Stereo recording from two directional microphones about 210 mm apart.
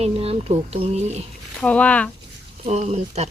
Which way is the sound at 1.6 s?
5° left (ahead or behind).